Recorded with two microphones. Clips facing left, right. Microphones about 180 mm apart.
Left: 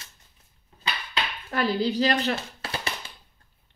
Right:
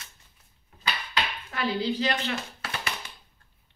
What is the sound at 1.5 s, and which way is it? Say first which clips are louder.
Speech: left 4 dB; 40° left (ahead or behind).